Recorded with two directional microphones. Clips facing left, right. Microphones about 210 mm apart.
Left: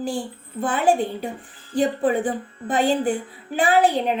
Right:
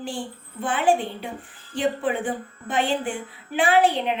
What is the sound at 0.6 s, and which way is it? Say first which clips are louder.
A woman's voice: left 2 dB; 40° left (ahead or behind).